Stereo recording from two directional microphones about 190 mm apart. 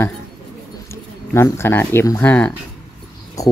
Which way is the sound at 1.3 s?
15° left (ahead or behind).